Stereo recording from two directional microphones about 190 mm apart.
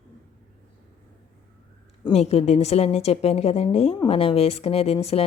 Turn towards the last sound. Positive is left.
turn(degrees=35)  # may be behind; listen again after turning